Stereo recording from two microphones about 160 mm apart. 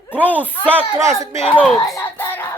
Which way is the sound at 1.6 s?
Centre (ahead or behind).